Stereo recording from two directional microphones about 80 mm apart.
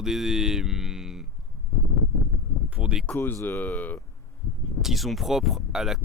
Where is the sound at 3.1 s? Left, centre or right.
Left.